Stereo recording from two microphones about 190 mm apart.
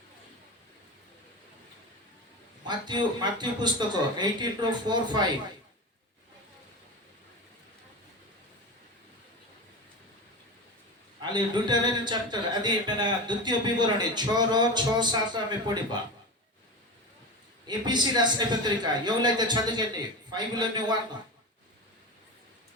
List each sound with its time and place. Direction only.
2.6 s speech: 25° right (ahead or behind)
11.2 s speech: 25° right (ahead or behind)
17.7 s speech: 20° right (ahead or behind)